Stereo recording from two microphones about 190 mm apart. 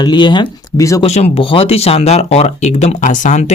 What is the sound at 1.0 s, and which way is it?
Speech, 35° left (ahead or behind).